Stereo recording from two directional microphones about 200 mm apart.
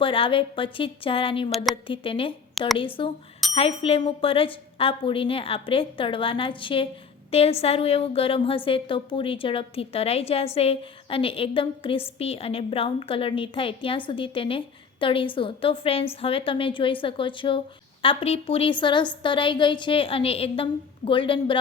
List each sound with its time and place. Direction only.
0.0 s a woman's voice: 25° left (ahead or behind)
1.5 s a woman's voice: centre (ahead or behind)
1.7 s a woman's voice: 25° left (ahead or behind)